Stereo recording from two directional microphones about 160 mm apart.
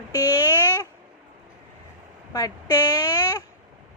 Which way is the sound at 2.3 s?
25° left (ahead or behind).